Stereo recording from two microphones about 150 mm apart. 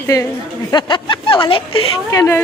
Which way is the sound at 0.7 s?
30° left (ahead or behind).